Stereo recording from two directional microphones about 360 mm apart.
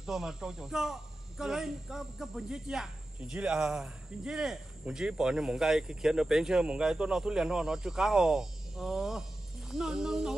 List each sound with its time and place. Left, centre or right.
0.0 s speech: centre